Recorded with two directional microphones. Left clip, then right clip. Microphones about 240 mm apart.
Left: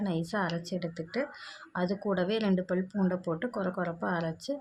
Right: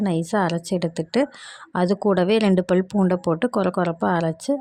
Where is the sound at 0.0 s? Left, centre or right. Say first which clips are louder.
Right 10 dB; right.